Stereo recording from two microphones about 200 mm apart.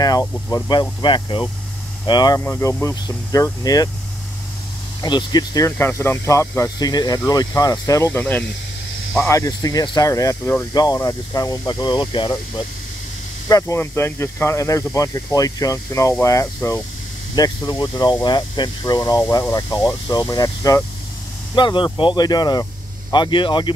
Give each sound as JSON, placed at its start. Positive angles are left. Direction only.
{"t": 0.0, "sound": "speech", "side_deg": 20}
{"t": 5.0, "sound": "speech", "side_deg": 20}
{"t": 13.5, "sound": "speech", "side_deg": 15}